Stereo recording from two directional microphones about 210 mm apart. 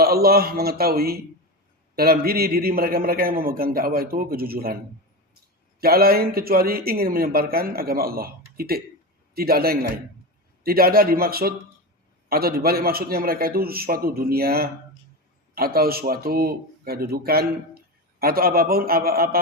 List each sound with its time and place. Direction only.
0.0 s speech: 45° right (ahead or behind)
5.8 s speech: 45° right (ahead or behind)